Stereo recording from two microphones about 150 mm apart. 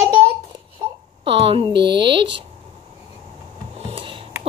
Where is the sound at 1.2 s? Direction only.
35° right (ahead or behind).